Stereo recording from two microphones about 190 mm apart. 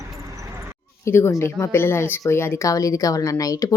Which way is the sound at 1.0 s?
15° left (ahead or behind).